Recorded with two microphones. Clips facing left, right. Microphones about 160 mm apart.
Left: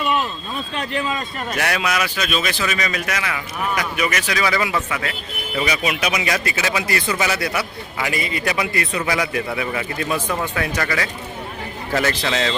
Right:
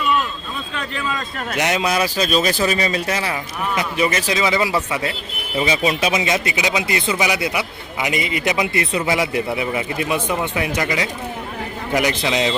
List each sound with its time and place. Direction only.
0.8 s speech: 30° left (ahead or behind)
1.5 s a man's voice: 20° right (ahead or behind)